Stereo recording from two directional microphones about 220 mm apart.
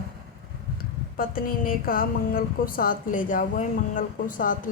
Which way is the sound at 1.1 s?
40° left (ahead or behind).